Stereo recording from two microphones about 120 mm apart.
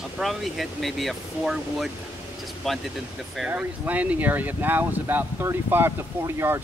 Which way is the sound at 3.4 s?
10° right (ahead or behind).